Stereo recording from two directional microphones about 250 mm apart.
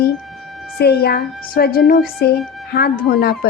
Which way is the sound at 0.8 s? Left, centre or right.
Left.